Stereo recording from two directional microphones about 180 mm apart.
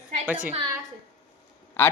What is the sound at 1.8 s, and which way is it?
Speech, 10° left (ahead or behind).